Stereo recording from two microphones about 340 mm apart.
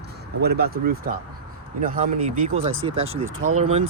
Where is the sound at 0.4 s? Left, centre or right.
Right.